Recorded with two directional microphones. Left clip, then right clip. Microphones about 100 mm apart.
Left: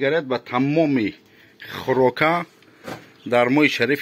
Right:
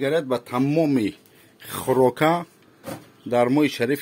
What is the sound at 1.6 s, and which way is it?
Speech, 55° right (ahead or behind).